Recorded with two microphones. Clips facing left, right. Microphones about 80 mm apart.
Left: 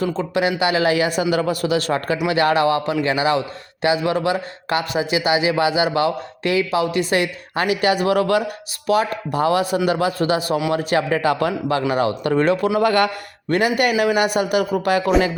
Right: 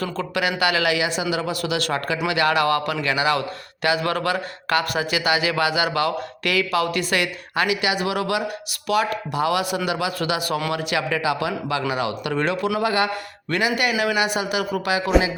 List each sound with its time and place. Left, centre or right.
0.0 s speech: left
2.6 s a man's voice: left
12.8 s speech: left
13.5 s a man's voice: left